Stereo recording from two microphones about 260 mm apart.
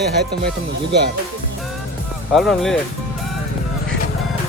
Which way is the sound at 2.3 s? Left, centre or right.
Centre.